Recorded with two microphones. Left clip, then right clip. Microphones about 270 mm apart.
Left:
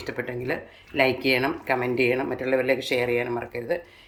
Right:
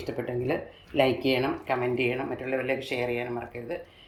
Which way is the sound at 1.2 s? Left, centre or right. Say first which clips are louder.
Left 3 dB; centre.